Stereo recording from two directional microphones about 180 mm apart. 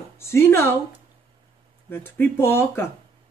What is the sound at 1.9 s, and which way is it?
Speech, 10° left (ahead or behind).